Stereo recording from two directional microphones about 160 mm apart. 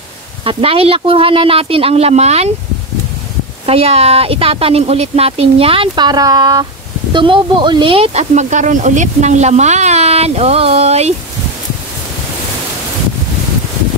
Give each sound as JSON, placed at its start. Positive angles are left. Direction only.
{"t": 0.5, "sound": "speech", "side_deg": -35}
{"t": 3.6, "sound": "speech", "side_deg": -40}